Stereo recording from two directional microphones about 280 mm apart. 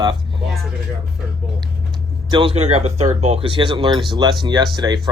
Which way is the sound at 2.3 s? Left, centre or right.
Centre.